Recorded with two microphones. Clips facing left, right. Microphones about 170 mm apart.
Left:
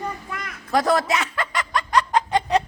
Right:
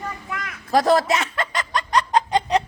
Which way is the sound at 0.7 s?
30° right (ahead or behind).